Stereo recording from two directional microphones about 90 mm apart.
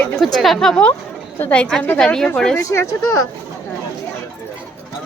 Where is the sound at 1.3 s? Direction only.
20° left (ahead or behind).